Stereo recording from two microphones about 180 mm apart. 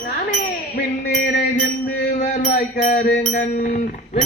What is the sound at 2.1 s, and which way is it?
Music, 45° left (ahead or behind).